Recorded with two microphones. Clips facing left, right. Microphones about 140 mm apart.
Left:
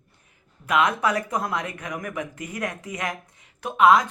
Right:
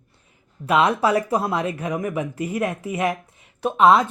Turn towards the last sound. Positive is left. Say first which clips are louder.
# right 2 dB
turn(degrees=-30)  # may be behind; listen again after turning